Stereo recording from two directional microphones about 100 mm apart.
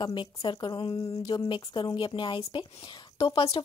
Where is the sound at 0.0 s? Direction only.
50° left (ahead or behind).